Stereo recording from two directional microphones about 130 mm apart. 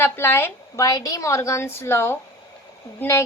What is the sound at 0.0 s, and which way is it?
Speech, 15° left (ahead or behind).